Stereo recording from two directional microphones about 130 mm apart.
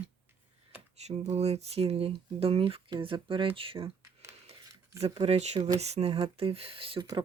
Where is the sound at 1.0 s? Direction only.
55° right (ahead or behind).